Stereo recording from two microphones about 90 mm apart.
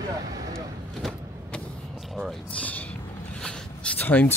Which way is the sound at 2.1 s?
Centre (ahead or behind).